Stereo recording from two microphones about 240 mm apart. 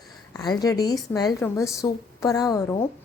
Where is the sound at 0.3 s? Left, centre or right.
Centre.